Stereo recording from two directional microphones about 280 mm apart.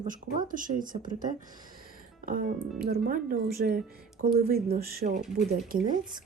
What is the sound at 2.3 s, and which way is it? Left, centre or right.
Speech, right.